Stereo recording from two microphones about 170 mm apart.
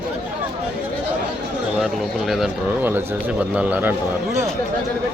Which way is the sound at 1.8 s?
Centre (ahead or behind).